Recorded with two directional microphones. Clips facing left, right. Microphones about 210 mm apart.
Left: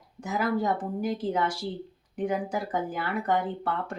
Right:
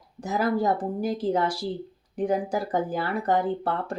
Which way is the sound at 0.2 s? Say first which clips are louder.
Right 3 dB; 35° right (ahead or behind).